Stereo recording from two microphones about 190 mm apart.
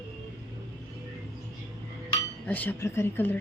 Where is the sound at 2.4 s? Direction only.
10° left (ahead or behind).